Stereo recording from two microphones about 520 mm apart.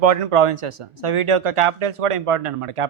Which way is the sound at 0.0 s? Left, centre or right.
Right.